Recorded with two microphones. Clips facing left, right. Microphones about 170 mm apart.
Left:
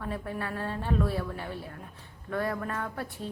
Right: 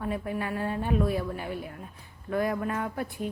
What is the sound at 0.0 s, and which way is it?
A woman's voice, 15° right (ahead or behind).